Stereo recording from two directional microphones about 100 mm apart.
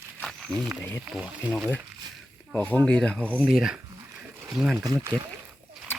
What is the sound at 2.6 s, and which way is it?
Speech, 15° left (ahead or behind).